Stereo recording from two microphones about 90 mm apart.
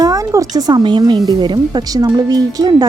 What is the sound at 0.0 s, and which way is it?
Speech, 40° right (ahead or behind).